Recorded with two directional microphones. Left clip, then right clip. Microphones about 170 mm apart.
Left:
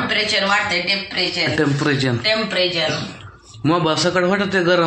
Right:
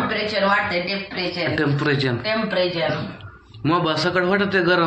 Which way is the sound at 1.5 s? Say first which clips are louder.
Left 2 dB; 55° left (ahead or behind).